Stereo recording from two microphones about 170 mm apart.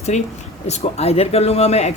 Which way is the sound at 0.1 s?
40° left (ahead or behind).